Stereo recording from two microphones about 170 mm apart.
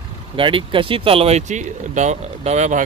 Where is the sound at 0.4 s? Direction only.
30° right (ahead or behind).